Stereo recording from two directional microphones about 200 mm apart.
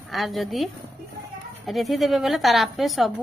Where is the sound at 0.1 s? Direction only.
Centre (ahead or behind).